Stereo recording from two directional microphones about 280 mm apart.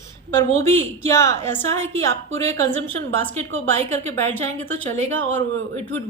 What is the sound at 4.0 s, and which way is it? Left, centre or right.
A woman's voice, right.